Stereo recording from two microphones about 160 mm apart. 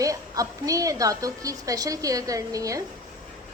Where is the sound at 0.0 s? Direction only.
20° right (ahead or behind).